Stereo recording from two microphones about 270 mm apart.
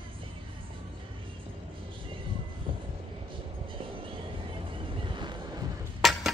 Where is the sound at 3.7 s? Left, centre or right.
Centre.